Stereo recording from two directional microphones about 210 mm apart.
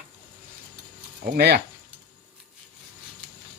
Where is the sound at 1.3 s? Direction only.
50° right (ahead or behind).